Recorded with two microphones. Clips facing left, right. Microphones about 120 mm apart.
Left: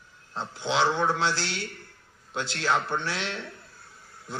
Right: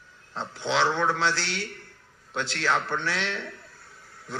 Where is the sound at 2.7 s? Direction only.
10° left (ahead or behind).